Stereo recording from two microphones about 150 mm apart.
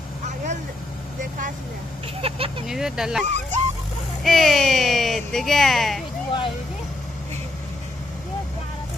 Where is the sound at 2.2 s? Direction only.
35° right (ahead or behind).